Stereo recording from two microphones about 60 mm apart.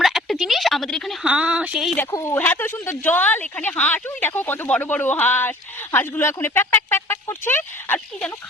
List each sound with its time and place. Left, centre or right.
0.0 s a sound: centre
1.2 s a woman's voice: centre
2.4 s speech: left
3.0 s speech: left